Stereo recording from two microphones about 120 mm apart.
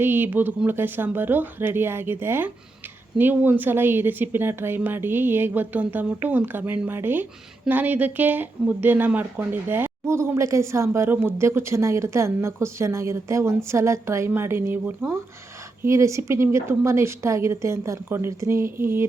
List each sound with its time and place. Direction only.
0.0 s speech: 15° right (ahead or behind)